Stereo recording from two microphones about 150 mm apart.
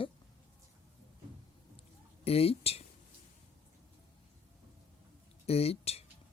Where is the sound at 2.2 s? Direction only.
40° left (ahead or behind).